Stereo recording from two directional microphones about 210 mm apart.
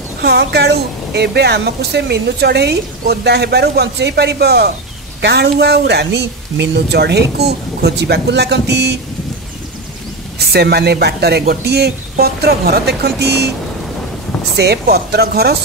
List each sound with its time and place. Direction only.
0.2 s a woman's voice: 50° right (ahead or behind)
10.5 s a woman's voice: 50° right (ahead or behind)
14.6 s a woman's voice: 50° right (ahead or behind)